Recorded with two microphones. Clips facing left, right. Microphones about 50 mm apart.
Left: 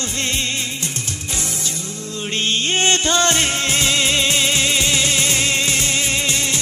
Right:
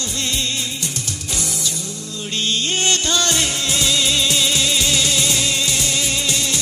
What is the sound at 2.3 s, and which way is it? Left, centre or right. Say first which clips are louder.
Music: left 2 dB; left.